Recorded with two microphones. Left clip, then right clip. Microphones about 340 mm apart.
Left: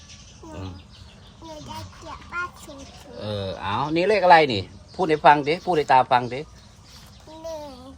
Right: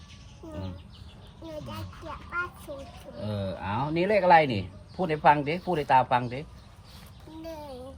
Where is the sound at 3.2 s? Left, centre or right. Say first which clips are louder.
Left 5 dB; left.